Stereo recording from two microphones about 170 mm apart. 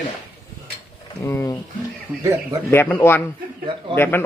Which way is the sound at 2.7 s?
10° left (ahead or behind).